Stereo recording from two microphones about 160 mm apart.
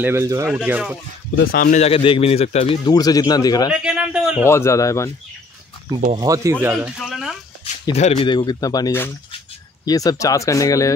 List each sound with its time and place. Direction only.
0.0 s speech: 15° right (ahead or behind)
0.5 s speech: 5° right (ahead or behind)
1.4 s speech: 70° left (ahead or behind)
1.8 s a man's voice: 35° left (ahead or behind)
2.8 s speech: 25° left (ahead or behind)
3.8 s speech: 5° right (ahead or behind)
4.5 s speech: 15° left (ahead or behind)
6.1 s speech: 20° right (ahead or behind); by 7.3 s centre (ahead or behind)
7.9 s a man's voice: 40° left (ahead or behind)
8.3 s speech: 25° left (ahead or behind)